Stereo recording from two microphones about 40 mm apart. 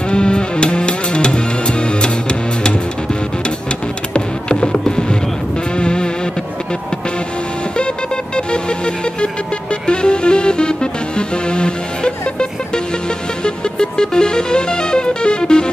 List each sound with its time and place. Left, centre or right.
0.1 s music: left
4.1 s music: left
8.4 s music: left